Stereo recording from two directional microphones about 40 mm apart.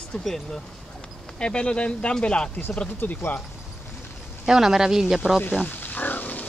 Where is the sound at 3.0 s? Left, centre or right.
Left.